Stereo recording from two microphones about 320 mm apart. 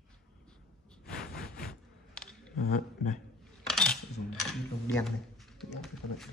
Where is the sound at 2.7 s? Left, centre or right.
Left.